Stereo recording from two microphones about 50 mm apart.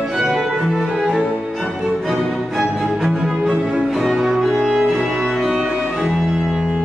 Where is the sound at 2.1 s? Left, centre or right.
Centre.